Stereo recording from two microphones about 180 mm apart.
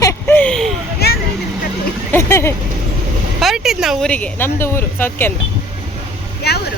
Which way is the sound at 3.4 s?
Centre (ahead or behind).